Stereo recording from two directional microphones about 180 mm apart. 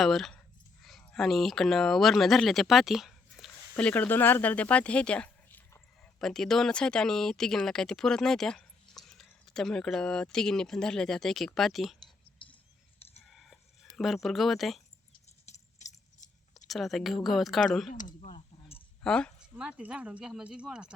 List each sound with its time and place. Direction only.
0.0 s speech: centre (ahead or behind)
12.4 s whispering: 25° left (ahead or behind)
13.2 s chicken: centre (ahead or behind)
15.4 s a sound: 40° left (ahead or behind)
16.6 s speech: centre (ahead or behind)
17.9 s speech: 45° left (ahead or behind)
18.3 s a sound: 35° left (ahead or behind)
19.0 s speech: 5° left (ahead or behind)
19.5 s speech: 5° right (ahead or behind)